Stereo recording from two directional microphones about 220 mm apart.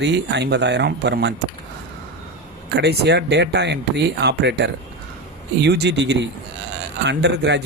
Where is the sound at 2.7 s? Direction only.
45° right (ahead or behind).